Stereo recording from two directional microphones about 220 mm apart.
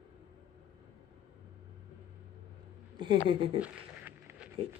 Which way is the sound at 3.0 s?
20° right (ahead or behind).